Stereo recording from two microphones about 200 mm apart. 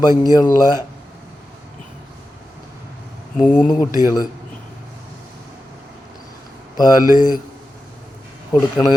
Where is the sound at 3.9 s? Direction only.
15° right (ahead or behind).